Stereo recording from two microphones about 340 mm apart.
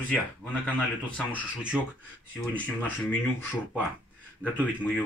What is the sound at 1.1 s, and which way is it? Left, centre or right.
Speech, centre.